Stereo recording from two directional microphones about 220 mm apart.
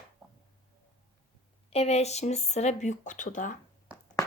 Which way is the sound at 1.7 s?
30° left (ahead or behind).